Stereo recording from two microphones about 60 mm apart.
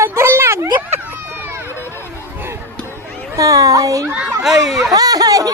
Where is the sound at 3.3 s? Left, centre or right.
Right.